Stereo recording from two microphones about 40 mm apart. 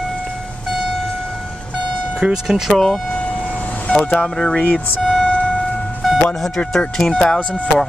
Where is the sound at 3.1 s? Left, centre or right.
Left.